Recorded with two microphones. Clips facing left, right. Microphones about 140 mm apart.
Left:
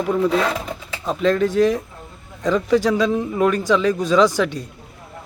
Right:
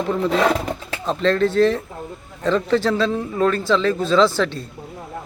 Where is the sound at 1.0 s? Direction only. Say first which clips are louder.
Even; 10° left (ahead or behind).